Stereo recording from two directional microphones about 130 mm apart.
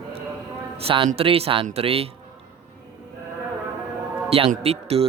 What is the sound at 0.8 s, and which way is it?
Speech, 45° right (ahead or behind).